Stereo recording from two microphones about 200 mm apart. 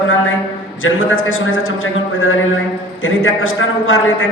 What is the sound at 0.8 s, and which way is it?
A man's voice, 85° left.